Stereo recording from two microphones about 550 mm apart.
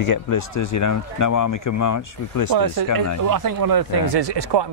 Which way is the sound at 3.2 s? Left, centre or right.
Right.